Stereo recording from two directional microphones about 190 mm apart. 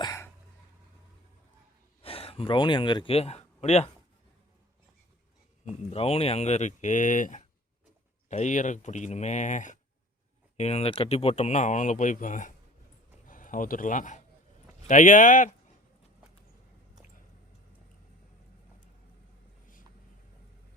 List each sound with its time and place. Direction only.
0.0 s a sound: 15° left (ahead or behind)
2.0 s speech: 30° left (ahead or behind)
5.6 s speech: 30° left (ahead or behind)